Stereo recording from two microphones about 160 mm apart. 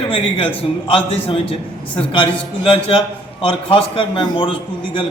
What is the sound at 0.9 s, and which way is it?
A man's voice, 35° left (ahead or behind).